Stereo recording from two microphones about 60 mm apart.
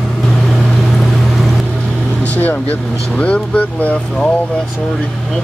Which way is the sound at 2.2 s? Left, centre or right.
Left.